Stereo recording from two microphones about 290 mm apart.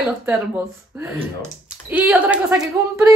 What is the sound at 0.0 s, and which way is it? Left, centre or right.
Speech, centre.